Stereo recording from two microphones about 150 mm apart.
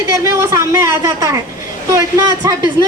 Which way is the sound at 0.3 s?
20° right (ahead or behind).